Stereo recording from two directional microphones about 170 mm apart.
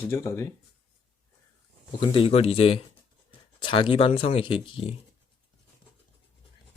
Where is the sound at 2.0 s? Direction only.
30° left (ahead or behind).